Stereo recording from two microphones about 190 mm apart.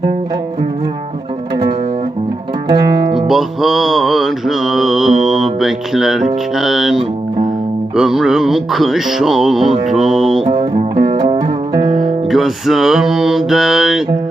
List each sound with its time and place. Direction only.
3.2 s music: centre (ahead or behind)
10.4 s music: 30° right (ahead or behind)
11.9 s music: centre (ahead or behind)